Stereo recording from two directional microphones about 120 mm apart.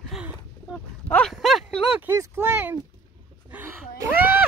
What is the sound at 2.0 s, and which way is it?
Speech, 20° right (ahead or behind).